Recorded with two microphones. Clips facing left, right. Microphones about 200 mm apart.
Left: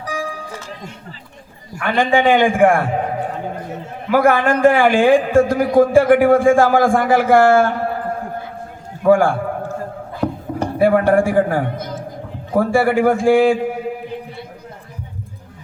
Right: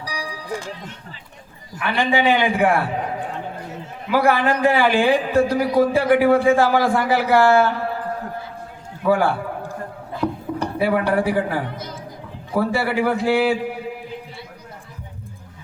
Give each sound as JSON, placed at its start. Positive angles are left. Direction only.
{"t": 0.0, "sound": "music", "side_deg": 50}
{"t": 1.8, "sound": "a man's voice", "side_deg": 50}
{"t": 9.0, "sound": "a man's voice", "side_deg": 50}
{"t": 10.6, "sound": "a man's voice", "side_deg": 50}